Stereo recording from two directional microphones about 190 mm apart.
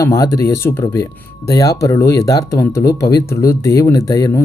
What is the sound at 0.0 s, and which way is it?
Speech, 15° left (ahead or behind).